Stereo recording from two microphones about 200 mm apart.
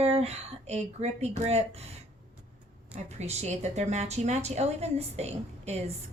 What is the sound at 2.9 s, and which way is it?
A woman's voice, 35° right (ahead or behind).